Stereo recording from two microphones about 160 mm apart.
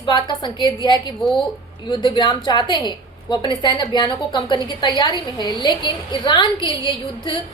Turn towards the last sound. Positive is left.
turn(degrees=30)  # may be behind; listen again after turning